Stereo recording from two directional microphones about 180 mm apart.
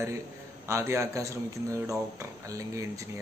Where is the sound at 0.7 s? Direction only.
15° right (ahead or behind).